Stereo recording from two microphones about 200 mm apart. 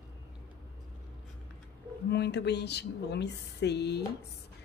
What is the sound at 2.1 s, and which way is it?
Speech, 55° left (ahead or behind).